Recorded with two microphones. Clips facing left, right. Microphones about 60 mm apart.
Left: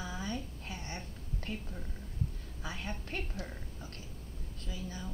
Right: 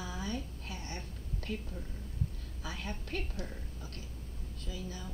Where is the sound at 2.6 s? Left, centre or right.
Left.